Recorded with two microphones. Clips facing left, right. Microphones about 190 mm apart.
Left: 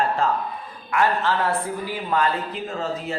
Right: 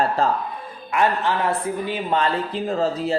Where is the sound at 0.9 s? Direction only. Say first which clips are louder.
Right 1 dB; 20° right (ahead or behind).